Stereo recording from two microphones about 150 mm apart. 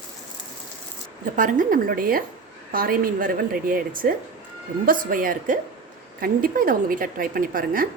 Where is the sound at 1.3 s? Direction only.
60° right (ahead or behind).